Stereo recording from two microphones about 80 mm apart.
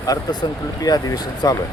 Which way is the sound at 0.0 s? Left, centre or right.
Left.